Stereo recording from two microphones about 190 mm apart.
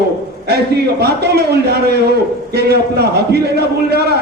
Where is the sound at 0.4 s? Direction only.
60° right (ahead or behind).